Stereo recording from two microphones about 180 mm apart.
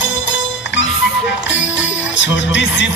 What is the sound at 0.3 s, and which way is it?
Music, 90° left.